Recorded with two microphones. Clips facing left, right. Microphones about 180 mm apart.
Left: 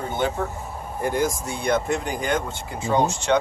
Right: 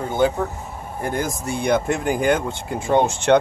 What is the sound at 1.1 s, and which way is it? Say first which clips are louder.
Speech: right 1 dB; 55° right (ahead or behind).